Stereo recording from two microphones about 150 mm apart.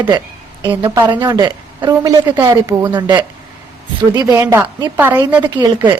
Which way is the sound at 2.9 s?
30° right (ahead or behind).